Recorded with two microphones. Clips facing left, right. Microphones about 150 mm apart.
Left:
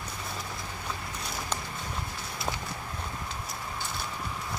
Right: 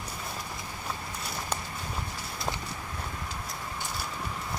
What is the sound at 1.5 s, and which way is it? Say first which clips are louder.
Walk: right 1 dB; 10° right (ahead or behind).